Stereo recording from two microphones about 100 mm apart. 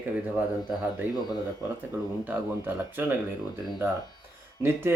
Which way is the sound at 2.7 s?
20° right (ahead or behind).